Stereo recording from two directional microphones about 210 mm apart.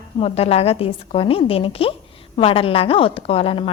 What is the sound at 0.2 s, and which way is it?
A woman's voice, 30° left (ahead or behind).